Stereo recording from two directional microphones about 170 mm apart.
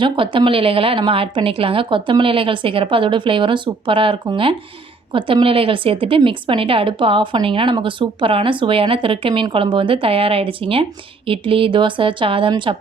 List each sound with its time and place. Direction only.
0.0 s a woman's voice: 30° right (ahead or behind)